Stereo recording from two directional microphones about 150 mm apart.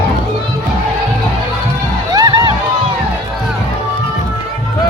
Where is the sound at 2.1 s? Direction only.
25° right (ahead or behind).